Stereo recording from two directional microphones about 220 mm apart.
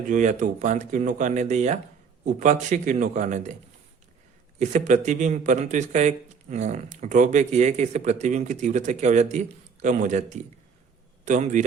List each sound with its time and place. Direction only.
0.1 s speech: 35° right (ahead or behind)
4.6 s speech: 35° right (ahead or behind)